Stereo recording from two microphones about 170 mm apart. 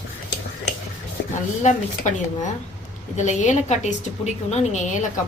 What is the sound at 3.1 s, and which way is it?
A woman's voice, 45° left (ahead or behind).